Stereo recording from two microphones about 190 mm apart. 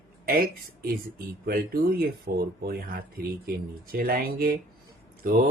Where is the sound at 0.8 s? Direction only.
55° right (ahead or behind).